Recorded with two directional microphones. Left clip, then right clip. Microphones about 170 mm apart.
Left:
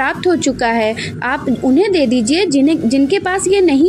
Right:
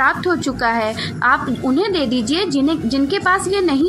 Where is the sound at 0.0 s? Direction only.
35° left (ahead or behind).